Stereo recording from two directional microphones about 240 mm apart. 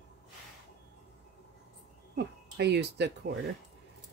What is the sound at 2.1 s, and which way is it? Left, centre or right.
Speech, right.